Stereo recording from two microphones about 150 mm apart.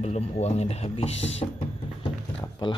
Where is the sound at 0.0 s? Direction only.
45° left (ahead or behind).